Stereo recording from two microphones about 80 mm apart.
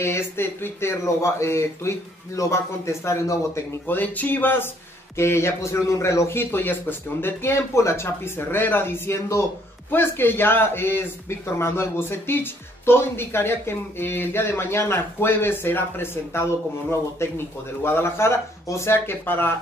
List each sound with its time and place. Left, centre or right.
0.0 s a man's voice: left
3.8 s a man's voice: left